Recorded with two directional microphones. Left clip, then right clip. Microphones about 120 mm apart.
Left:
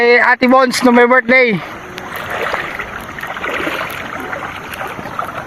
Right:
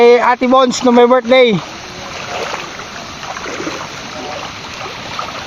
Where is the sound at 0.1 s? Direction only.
30° left (ahead or behind).